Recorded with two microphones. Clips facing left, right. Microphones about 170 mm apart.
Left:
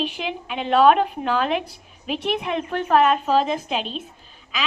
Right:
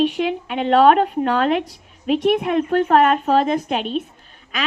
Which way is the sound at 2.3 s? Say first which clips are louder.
Right 7 dB; 50° right (ahead or behind).